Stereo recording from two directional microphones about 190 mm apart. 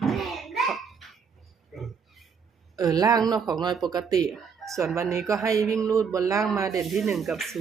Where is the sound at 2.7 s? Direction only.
20° right (ahead or behind).